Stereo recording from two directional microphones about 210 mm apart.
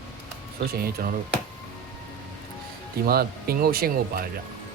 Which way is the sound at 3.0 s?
45° right (ahead or behind).